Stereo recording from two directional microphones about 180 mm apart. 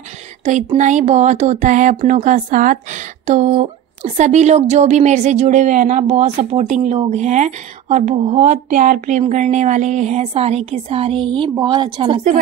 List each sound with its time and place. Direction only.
0.5 s speech: 40° right (ahead or behind)